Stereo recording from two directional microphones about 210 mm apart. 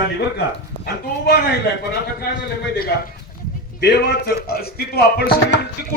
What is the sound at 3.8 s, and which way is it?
Speech, 50° left (ahead or behind).